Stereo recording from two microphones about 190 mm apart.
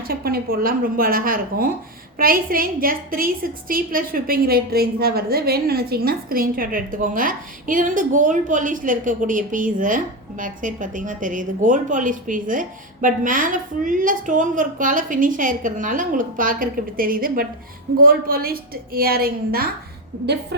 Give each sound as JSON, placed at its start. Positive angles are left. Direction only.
{"t": 0.1, "sound": "a woman's voice", "side_deg": -50}